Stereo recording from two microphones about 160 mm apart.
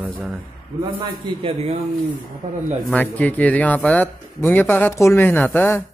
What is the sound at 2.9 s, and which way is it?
Speech, 10° left (ahead or behind).